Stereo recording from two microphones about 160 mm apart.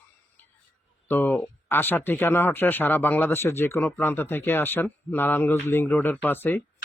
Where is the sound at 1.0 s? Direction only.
10° left (ahead or behind).